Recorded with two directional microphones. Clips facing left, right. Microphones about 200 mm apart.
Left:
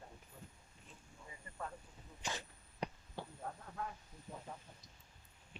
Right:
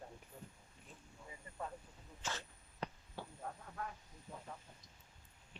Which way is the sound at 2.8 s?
15° left (ahead or behind).